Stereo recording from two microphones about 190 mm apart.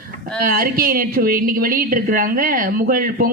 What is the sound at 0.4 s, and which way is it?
A woman's voice, 50° right (ahead or behind).